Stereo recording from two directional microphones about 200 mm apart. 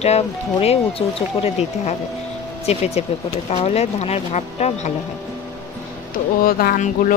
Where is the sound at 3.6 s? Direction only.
30° left (ahead or behind).